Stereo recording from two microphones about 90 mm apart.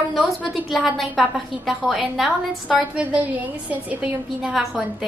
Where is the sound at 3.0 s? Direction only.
15° right (ahead or behind).